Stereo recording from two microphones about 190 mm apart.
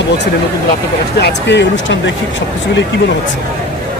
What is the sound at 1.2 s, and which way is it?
Speech, 65° left (ahead or behind).